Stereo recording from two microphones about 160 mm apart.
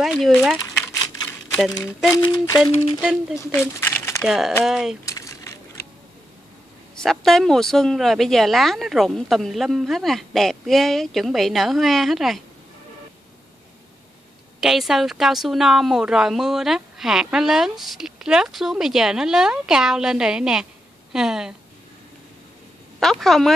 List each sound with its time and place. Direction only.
0.0 s a woman's voice: 5° left (ahead or behind)
2.1 s speech: 25° left (ahead or behind)
3.0 s speech: 5° right (ahead or behind)
3.3 s speech: 15° left (ahead or behind)
4.2 s a woman's voice: 5° right (ahead or behind)
5.0 s a sound: 20° left (ahead or behind)
7.0 s a woman's voice: centre (ahead or behind)
14.6 s a woman's voice: centre (ahead or behind)
22.9 s a woman's voice: centre (ahead or behind)